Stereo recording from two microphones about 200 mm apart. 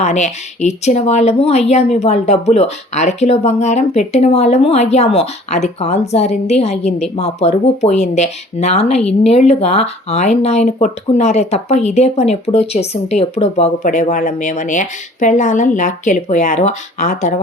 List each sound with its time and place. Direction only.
0.0 s speech: 35° left (ahead or behind)